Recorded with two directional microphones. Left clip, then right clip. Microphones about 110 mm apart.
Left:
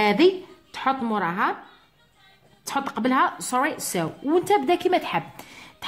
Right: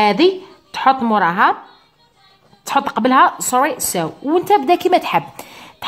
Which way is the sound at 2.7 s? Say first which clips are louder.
Right 10 dB; 35° right (ahead or behind).